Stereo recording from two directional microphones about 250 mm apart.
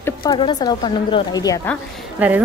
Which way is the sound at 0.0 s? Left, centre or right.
Centre.